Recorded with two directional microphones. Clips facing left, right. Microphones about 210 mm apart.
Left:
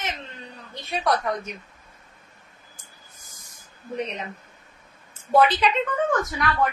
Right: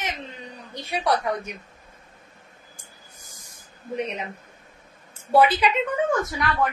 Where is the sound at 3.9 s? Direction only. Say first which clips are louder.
Right 1 dB; 10° right (ahead or behind).